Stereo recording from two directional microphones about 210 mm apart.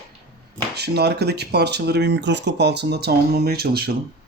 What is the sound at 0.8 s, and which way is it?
Speech, 50° right (ahead or behind).